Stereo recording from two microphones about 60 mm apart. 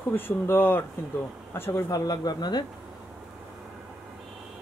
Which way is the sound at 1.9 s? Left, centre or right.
Left.